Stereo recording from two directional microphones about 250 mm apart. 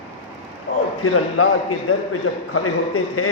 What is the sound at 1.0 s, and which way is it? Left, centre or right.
A man's voice, left.